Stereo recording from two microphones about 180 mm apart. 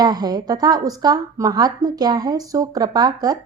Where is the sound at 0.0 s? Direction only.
20° right (ahead or behind).